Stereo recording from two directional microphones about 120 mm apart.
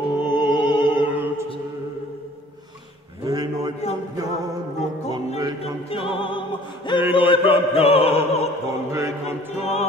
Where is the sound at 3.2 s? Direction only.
30° right (ahead or behind).